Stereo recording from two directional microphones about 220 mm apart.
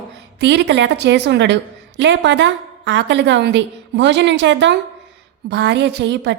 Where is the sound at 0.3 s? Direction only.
55° right (ahead or behind).